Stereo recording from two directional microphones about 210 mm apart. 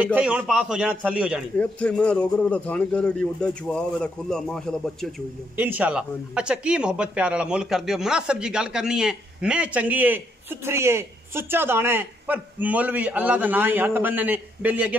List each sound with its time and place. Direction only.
0.0 s a man's voice: 5° right (ahead or behind)
1.6 s a man's voice: 5° left (ahead or behind)
5.6 s speech: 10° right (ahead or behind)